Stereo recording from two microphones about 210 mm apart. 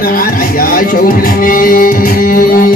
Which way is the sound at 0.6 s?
40° left (ahead or behind).